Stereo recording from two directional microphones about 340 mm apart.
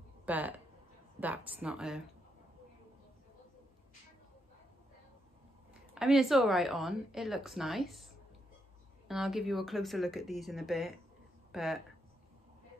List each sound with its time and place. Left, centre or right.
0.2 s speech: centre
5.9 s speech: centre